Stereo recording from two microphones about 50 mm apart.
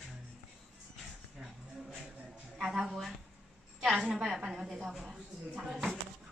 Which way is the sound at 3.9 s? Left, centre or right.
Centre.